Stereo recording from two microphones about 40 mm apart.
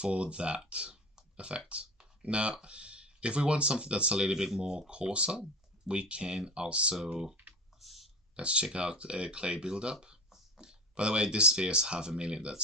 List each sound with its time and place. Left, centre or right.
0.0 s speech: right
7.1 s speech: centre
7.8 s a sound: centre
8.4 s speech: right